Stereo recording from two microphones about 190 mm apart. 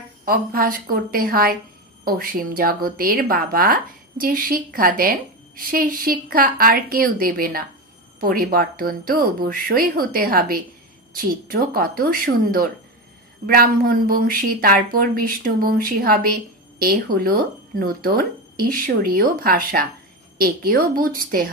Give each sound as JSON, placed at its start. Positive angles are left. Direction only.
{"t": 0.2, "sound": "speech", "side_deg": -50}